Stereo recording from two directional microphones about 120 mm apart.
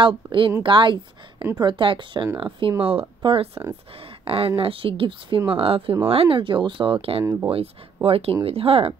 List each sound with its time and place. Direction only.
0.0 s speech: 45° right (ahead or behind)